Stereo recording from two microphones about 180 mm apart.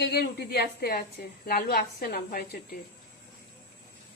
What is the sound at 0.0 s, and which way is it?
A woman's voice, 65° left (ahead or behind).